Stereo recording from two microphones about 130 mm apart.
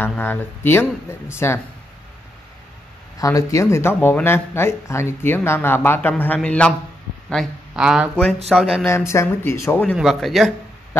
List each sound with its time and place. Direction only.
0.2 s speech: 15° left (ahead or behind)
3.2 s speech: 25° left (ahead or behind); by 6.7 s 10° left (ahead or behind)
7.7 s speech: 5° right (ahead or behind)
8.8 s speech: 20° left (ahead or behind)
9.9 s speech: centre (ahead or behind)